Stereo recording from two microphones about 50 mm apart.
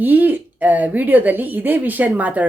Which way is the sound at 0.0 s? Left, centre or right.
Right.